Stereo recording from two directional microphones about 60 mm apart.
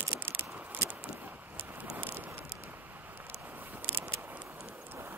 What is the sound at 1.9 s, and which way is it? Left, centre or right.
Vehicle, right.